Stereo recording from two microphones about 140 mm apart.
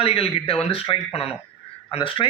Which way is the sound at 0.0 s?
45° left (ahead or behind).